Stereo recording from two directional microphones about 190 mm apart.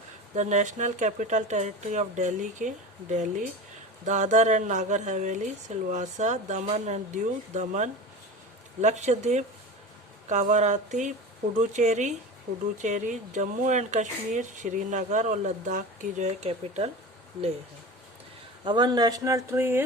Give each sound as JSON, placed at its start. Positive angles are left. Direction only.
{"t": 0.3, "sound": "speech", "side_deg": -40}
{"t": 18.6, "sound": "speech", "side_deg": -25}